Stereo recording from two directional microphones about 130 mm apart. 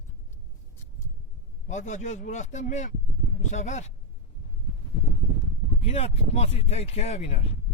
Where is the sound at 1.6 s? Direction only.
70° left (ahead or behind).